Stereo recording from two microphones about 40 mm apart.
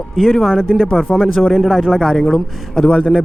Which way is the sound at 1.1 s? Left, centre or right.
Centre.